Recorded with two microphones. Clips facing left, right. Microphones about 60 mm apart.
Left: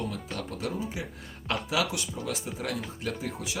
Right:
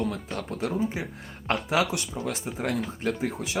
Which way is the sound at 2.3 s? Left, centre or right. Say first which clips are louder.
Right 4 dB; right.